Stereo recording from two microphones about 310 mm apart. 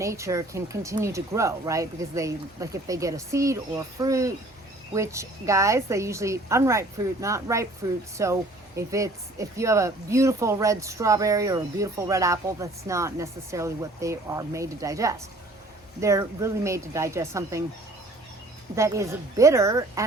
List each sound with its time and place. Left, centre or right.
0.0 s speech: centre
18.8 s speech: centre